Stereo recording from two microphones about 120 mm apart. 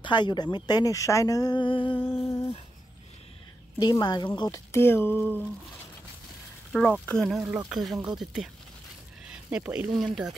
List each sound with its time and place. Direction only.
0.0 s speech: 40° left (ahead or behind)
2.0 s speech: 20° left (ahead or behind)
3.8 s speech: 35° left (ahead or behind)
4.7 s speech: 20° left (ahead or behind)
6.7 s speech: centre (ahead or behind)